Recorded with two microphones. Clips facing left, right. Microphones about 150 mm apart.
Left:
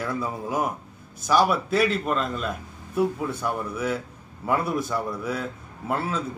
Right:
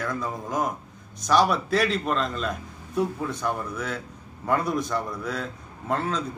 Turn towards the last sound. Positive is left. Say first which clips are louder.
# even
turn(degrees=5)  # may be behind; listen again after turning